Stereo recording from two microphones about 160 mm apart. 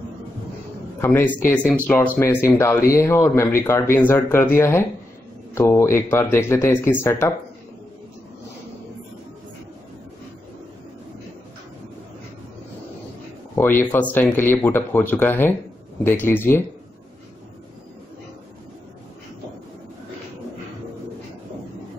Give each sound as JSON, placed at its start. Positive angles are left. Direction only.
{"t": 1.0, "sound": "speech", "side_deg": 15}
{"t": 13.6, "sound": "speech", "side_deg": 15}